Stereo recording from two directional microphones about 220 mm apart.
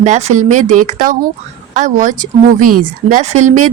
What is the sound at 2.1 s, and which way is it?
Speech, 90° right.